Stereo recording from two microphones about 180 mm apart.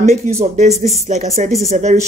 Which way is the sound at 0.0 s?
35° right (ahead or behind).